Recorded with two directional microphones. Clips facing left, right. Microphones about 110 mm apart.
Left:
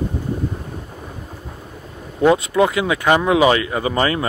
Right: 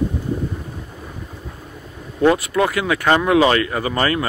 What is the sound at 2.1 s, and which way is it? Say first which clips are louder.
Speech: left 1 dB; 20° left (ahead or behind).